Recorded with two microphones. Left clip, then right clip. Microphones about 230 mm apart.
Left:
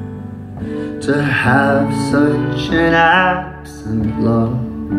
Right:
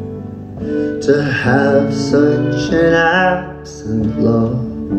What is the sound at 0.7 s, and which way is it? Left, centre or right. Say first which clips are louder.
Music: right 4 dB; centre.